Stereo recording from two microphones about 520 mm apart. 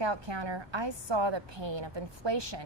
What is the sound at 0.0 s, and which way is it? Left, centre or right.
A woman's voice, right.